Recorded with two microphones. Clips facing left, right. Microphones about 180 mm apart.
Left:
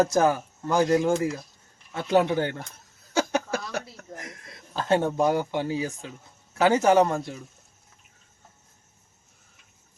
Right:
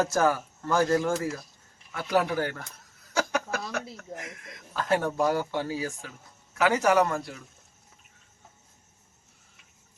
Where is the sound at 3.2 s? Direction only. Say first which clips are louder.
Left 3 dB; 30° left (ahead or behind).